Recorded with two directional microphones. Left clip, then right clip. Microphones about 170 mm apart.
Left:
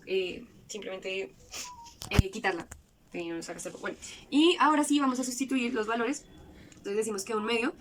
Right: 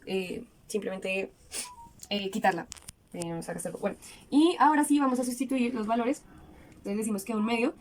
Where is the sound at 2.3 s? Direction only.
25° right (ahead or behind).